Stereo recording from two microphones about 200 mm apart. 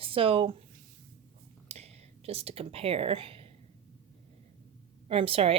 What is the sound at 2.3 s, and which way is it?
A woman's voice, 30° right (ahead or behind).